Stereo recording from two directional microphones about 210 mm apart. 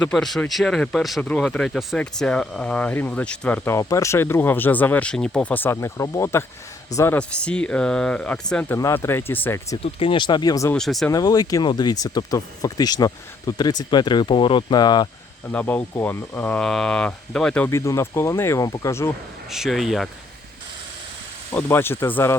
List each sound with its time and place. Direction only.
0.0 s speech: centre (ahead or behind)
9.8 s speech: 25° left (ahead or behind)
10.8 s speech: centre (ahead or behind)
11.1 s speech: 15° left (ahead or behind)
15.4 s speech: 5° left (ahead or behind)
19.5 s speech: centre (ahead or behind)
21.5 s speech: 10° left (ahead or behind)